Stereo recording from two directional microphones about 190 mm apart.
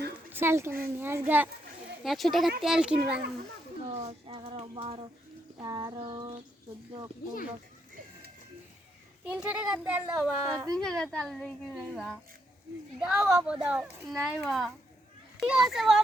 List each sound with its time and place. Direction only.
0.3 s a child's voice: 10° right (ahead or behind)
2.0 s speech: centre (ahead or behind)
3.8 s speech: 35° right (ahead or behind)
9.2 s a child's voice: 5° right (ahead or behind)